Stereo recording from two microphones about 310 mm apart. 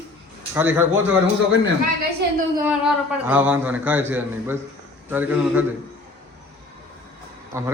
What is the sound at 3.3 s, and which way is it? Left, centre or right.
A man's voice, centre.